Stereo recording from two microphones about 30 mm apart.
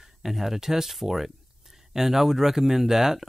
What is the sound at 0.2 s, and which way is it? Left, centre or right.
Speech, centre.